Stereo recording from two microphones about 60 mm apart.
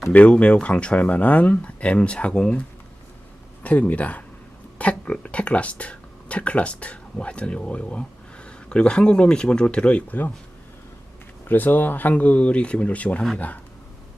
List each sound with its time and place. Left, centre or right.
0.1 s speech: left
3.6 s speech: left
11.4 s speech: left